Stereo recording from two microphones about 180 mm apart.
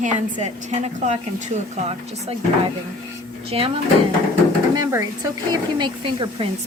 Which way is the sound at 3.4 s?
30° right (ahead or behind).